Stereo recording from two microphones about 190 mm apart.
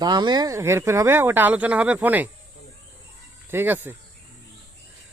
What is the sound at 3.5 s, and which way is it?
Speech, 10° right (ahead or behind).